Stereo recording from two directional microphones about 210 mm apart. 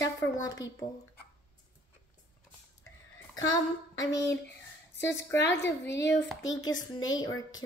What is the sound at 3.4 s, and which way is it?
Speech, 65° left (ahead or behind).